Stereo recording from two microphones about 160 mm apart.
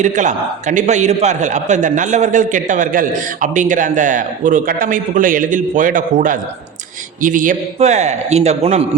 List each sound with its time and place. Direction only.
0.0 s a man's voice: 50° right (ahead or behind)